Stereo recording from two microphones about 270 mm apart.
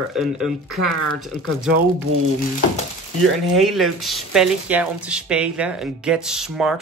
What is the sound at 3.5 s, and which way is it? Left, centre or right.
Speech, centre.